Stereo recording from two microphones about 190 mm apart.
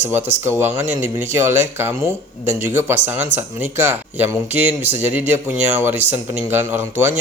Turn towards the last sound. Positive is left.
turn(degrees=-10)  # may be behind; listen again after turning